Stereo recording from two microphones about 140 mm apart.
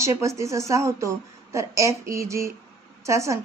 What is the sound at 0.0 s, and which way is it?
Speech, 20° right (ahead or behind).